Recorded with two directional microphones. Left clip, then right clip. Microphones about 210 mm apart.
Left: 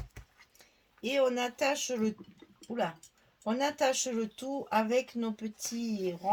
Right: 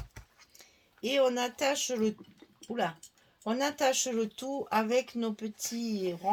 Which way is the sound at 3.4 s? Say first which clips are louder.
Even; 40° right (ahead or behind).